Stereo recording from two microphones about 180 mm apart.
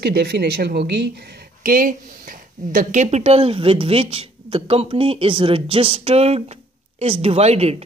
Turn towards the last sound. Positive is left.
turn(degrees=-35)  # may be behind; listen again after turning